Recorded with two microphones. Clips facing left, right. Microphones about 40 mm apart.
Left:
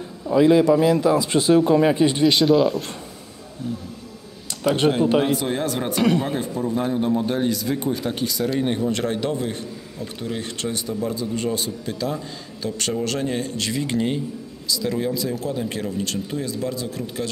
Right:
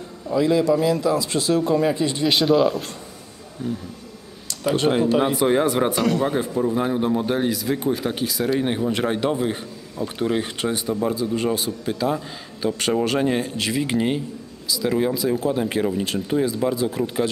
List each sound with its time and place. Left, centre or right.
0.3 s a man's voice: left
2.2 s speech: centre
5.2 s speech: centre
11.1 s speech: centre